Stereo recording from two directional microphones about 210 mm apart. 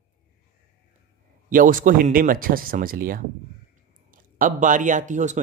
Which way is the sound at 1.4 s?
40° right (ahead or behind).